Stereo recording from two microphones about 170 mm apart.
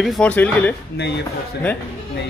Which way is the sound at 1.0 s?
80° left.